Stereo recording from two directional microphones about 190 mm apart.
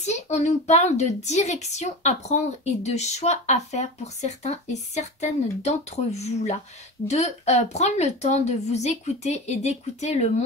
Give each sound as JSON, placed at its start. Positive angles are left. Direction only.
{"t": 0.0, "sound": "a woman's voice", "side_deg": 35}